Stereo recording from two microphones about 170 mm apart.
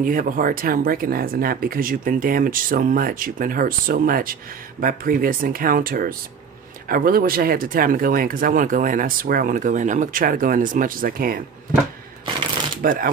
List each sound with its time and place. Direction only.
0.0 s speech: 55° right (ahead or behind)
12.8 s speech: 55° right (ahead or behind)